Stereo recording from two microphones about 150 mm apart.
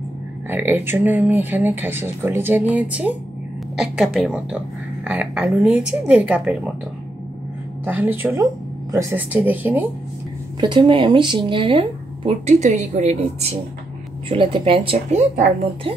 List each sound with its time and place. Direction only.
0.5 s speech: 15° right (ahead or behind)
7.8 s speech: 10° right (ahead or behind)
10.6 s speech: 30° right (ahead or behind)
12.4 s a woman's voice: 50° right (ahead or behind)